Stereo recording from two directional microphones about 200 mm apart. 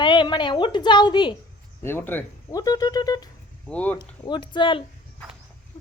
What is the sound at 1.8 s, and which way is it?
Speech, 10° left (ahead or behind).